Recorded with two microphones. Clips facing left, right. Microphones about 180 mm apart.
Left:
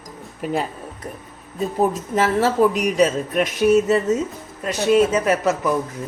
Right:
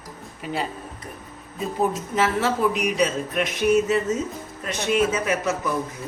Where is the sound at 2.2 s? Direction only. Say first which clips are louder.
Left 5 dB; 40° left (ahead or behind).